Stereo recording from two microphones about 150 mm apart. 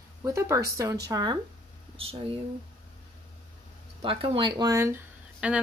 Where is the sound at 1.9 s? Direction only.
40° right (ahead or behind).